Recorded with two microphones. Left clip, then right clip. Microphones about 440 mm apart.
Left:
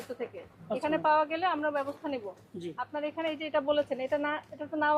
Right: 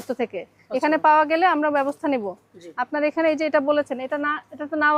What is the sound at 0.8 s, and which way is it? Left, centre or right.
A woman's voice, right.